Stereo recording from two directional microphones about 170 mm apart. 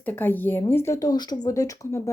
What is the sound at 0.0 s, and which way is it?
A woman's voice, 10° left (ahead or behind).